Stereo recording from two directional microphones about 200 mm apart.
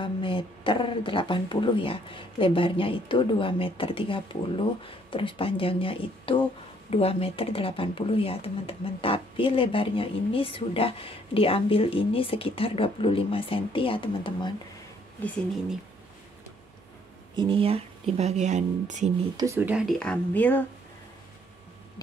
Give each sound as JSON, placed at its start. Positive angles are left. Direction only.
{"t": 0.0, "sound": "speech", "side_deg": 25}
{"t": 15.2, "sound": "speech", "side_deg": 10}
{"t": 17.4, "sound": "speech", "side_deg": -25}
{"t": 19.3, "sound": "speech", "side_deg": -15}